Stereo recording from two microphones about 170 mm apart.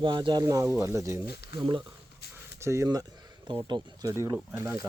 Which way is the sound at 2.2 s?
75° left (ahead or behind).